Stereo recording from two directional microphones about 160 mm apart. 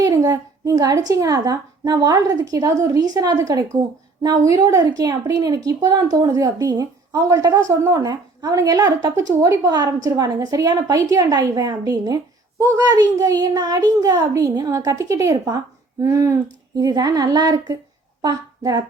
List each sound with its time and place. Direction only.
0.0 s a woman's voice: 25° right (ahead or behind)